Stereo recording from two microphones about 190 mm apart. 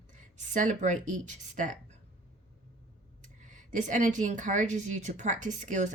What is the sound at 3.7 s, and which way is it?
Speech, 40° right (ahead or behind).